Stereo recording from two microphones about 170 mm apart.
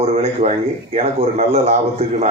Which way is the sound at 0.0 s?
35° right (ahead or behind).